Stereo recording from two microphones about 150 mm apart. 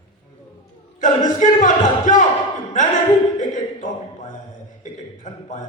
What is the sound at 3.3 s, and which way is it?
Speech, 55° left (ahead or behind).